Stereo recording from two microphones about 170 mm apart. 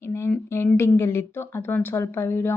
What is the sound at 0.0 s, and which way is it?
Speech, 15° left (ahead or behind).